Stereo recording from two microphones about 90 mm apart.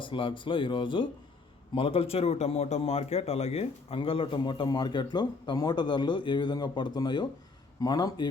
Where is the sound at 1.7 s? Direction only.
85° left.